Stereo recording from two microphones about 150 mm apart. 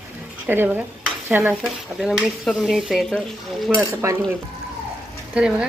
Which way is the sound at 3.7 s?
20° right (ahead or behind).